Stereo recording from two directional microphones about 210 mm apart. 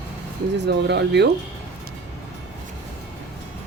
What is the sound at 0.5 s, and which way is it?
Speech, 55° right (ahead or behind).